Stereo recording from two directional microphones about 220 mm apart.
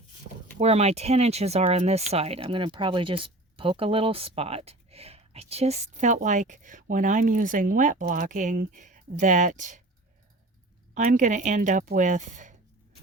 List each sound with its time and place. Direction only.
0.6 s speech: 30° right (ahead or behind)
10.9 s speech: 35° right (ahead or behind)